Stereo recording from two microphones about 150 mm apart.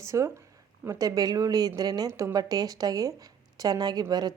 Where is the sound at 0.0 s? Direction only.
20° right (ahead or behind).